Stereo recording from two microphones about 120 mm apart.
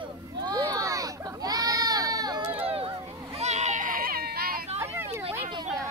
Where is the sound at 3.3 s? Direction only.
70° right (ahead or behind).